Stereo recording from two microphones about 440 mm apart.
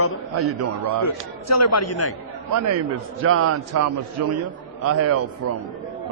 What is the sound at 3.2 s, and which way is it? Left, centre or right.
A man's voice, right.